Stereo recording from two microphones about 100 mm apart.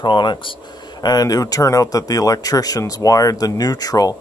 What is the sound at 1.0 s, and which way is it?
Speech, 40° left (ahead or behind).